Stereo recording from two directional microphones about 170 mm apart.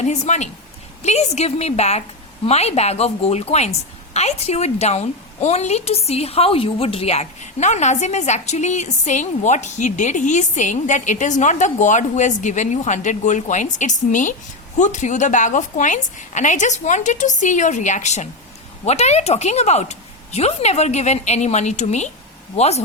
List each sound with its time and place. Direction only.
0.0 s a woman's voice: 45° left (ahead or behind)